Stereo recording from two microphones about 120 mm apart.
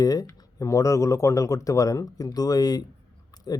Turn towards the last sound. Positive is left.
turn(degrees=35)  # may be behind; listen again after turning